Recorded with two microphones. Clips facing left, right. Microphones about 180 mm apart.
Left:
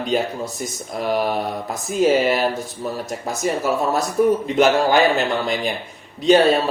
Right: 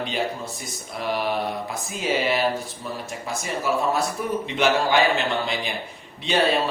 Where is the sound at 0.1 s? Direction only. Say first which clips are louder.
Left 6 dB; 45° left (ahead or behind).